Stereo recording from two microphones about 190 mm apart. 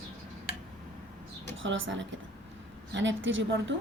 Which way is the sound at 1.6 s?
80° right.